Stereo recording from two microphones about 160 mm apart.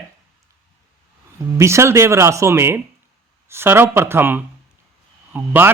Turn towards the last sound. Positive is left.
turn(degrees=-15)  # may be behind; listen again after turning